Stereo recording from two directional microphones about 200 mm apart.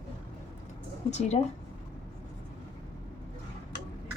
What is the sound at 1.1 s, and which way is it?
Speech, 35° left (ahead or behind).